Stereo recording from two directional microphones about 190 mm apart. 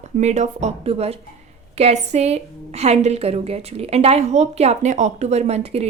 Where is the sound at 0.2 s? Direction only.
35° right (ahead or behind).